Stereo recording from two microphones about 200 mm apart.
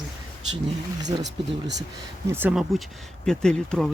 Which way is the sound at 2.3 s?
5° right (ahead or behind).